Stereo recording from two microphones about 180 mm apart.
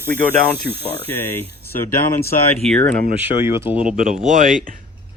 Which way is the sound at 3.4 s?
15° right (ahead or behind).